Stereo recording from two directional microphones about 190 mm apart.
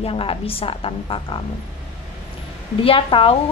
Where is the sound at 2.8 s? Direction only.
30° left (ahead or behind).